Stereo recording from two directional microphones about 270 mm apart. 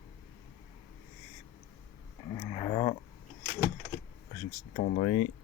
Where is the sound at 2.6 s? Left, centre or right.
Left.